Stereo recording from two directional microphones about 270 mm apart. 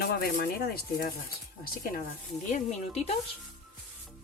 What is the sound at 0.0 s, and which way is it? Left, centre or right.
Speech, left.